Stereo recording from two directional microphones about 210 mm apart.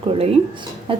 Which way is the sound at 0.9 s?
25° right (ahead or behind).